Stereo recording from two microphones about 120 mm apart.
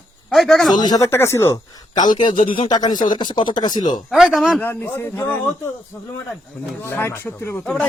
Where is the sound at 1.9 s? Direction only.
35° left (ahead or behind).